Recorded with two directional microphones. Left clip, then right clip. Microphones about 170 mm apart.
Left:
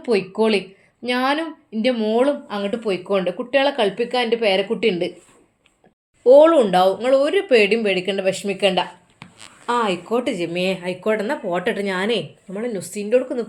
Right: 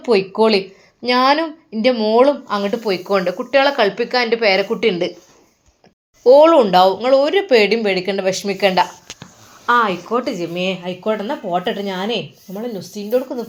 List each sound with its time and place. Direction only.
0.0 s speech: centre (ahead or behind)
6.2 s speech: centre (ahead or behind)